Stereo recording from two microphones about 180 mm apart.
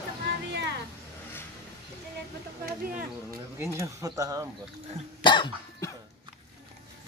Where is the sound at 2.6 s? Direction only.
50° right (ahead or behind).